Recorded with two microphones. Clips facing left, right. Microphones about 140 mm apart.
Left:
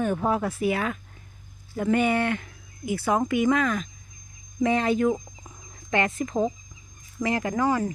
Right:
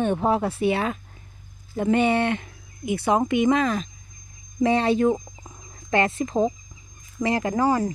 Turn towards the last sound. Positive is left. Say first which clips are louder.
# right 3 dB
turn(degrees=-35)  # may be behind; listen again after turning